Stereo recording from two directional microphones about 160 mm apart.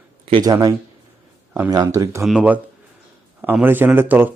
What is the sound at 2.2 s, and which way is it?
Speech, 5° right (ahead or behind).